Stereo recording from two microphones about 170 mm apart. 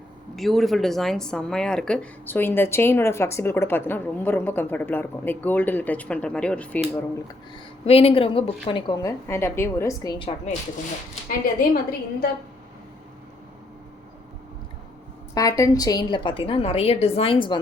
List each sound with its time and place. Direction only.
0.3 s a woman's voice: centre (ahead or behind)
7.5 s a woman's voice: 35° left (ahead or behind)
11.3 s a woman's voice: 60° left (ahead or behind)
15.4 s a woman's voice: 20° left (ahead or behind)